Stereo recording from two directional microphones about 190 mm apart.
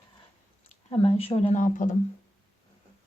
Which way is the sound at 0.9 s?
30° left (ahead or behind).